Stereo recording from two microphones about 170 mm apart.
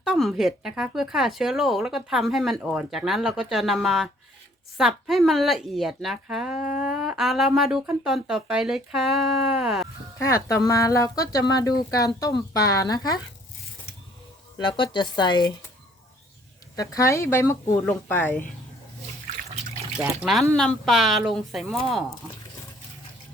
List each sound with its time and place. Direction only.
0.0 s speech: centre (ahead or behind)
10.2 s speech: 15° left (ahead or behind)
14.6 s speech: 30° left (ahead or behind)
16.7 s speech: 20° left (ahead or behind)
20.2 s speech: centre (ahead or behind)